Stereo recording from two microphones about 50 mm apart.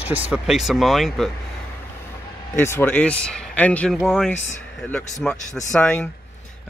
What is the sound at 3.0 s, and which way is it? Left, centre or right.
Speech, left.